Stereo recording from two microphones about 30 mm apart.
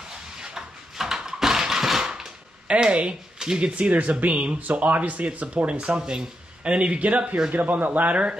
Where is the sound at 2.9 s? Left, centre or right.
Right.